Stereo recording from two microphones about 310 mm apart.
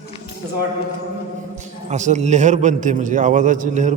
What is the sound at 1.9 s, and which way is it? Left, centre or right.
A man's voice, right.